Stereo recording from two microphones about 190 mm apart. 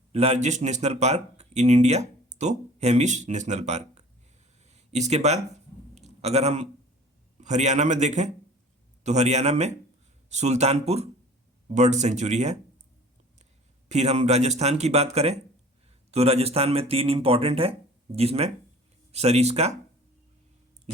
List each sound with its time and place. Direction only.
0.1 s speech: 35° right (ahead or behind)
4.6 s a sound: 35° right (ahead or behind)
7.3 s speech: 35° right (ahead or behind)
13.8 s speech: 35° right (ahead or behind)